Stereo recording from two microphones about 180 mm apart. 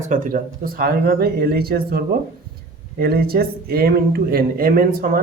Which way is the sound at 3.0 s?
60° right (ahead or behind).